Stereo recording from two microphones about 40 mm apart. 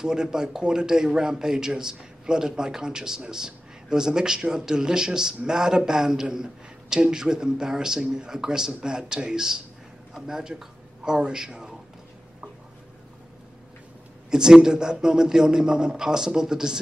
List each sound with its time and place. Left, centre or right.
0.0 s a man's voice: centre
14.3 s a man's voice: centre